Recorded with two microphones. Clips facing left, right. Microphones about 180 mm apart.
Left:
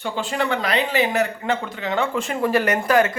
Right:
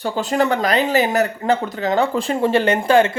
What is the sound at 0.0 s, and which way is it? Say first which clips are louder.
A man's voice: right 5 dB; 40° right (ahead or behind).